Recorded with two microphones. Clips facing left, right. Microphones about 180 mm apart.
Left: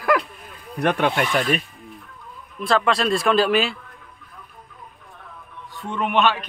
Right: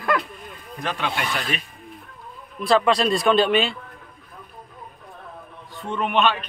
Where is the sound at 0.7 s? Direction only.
60° left (ahead or behind).